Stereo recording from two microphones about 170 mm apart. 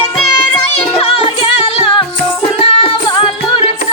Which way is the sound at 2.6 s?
35° left (ahead or behind).